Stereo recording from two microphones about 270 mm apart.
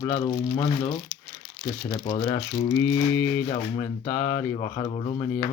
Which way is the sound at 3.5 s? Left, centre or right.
Centre.